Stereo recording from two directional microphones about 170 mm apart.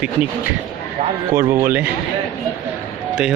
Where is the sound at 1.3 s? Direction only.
15° right (ahead or behind).